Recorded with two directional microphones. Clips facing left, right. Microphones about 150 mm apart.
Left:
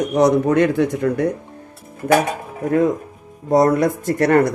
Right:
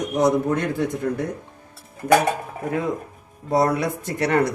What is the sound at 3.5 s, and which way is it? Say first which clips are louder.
Speech: left 6 dB; 45° left (ahead or behind).